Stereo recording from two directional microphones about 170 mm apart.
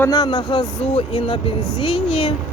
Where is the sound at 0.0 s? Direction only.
20° left (ahead or behind).